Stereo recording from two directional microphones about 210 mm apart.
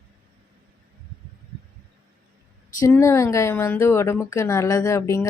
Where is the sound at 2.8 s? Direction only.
15° left (ahead or behind).